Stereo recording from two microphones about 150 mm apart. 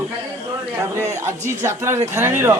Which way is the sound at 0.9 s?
15° right (ahead or behind).